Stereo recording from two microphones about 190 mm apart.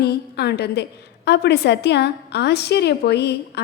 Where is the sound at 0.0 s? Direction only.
60° left (ahead or behind).